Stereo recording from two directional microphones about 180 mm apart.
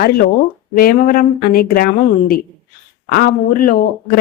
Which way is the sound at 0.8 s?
50° left (ahead or behind).